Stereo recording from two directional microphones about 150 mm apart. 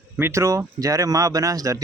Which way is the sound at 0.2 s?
20° right (ahead or behind).